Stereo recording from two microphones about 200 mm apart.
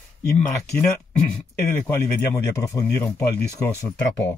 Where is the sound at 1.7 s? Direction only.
15° left (ahead or behind).